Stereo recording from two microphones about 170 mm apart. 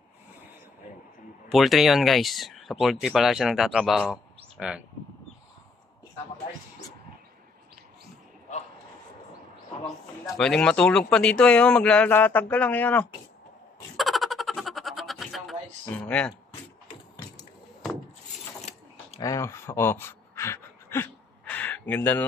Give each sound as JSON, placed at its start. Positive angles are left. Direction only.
{"t": 1.5, "sound": "speech", "side_deg": 0}
{"t": 10.3, "sound": "speech", "side_deg": 5}
{"t": 13.9, "sound": "a sound", "side_deg": 0}
{"t": 16.0, "sound": "speech", "side_deg": 5}
{"t": 18.7, "sound": "keys jangling", "side_deg": 40}
{"t": 19.2, "sound": "a sound", "side_deg": 20}